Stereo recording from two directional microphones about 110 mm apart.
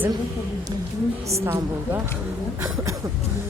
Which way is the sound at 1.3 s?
25° right (ahead or behind).